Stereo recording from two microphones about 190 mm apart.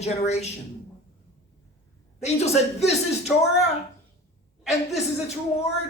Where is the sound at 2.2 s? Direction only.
35° left (ahead or behind).